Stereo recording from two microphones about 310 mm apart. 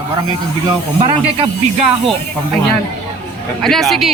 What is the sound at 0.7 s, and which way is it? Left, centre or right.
Speech, centre.